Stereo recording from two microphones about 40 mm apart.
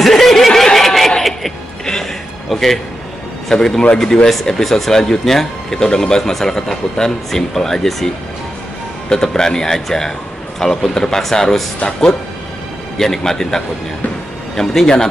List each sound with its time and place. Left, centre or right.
0.0 s snicker: centre
0.7 s a sound: centre
2.5 s a man's voice: centre
9.1 s speech: centre
12.9 s speech: centre